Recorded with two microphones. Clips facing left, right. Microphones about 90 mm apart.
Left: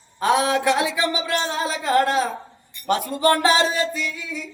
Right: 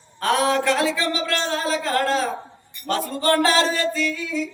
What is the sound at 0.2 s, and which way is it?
A man's voice, 15° left (ahead or behind).